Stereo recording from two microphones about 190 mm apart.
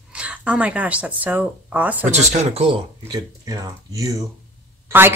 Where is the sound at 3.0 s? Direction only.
20° right (ahead or behind).